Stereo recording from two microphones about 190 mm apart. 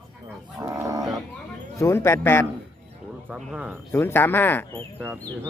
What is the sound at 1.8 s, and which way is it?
Speech, 15° left (ahead or behind).